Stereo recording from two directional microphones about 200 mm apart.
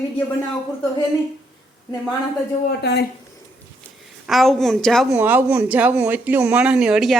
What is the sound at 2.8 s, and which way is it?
Speech, 55° left (ahead or behind).